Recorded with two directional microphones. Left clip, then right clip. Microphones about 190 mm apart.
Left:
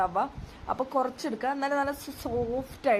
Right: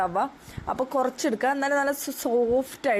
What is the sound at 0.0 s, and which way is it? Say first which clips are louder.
Speech: right 2 dB; 20° right (ahead or behind).